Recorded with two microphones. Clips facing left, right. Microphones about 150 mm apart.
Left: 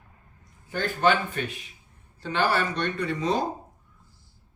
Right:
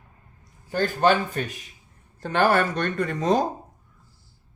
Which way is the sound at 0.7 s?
40° right (ahead or behind).